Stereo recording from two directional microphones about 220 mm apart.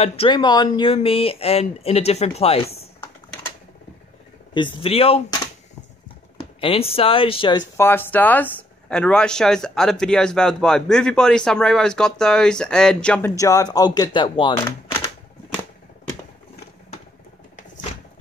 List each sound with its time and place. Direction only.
0.0 s speech: 25° left (ahead or behind)
4.6 s speech: 20° left (ahead or behind)
6.3 s speech: 25° left (ahead or behind)